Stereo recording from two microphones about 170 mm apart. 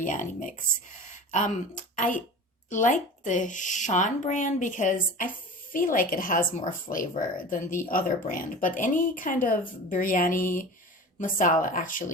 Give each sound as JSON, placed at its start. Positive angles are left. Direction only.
{"t": 0.0, "sound": "speech", "side_deg": 50}